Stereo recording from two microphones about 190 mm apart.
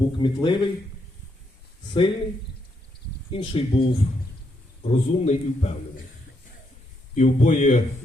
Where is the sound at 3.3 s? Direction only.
30° left (ahead or behind).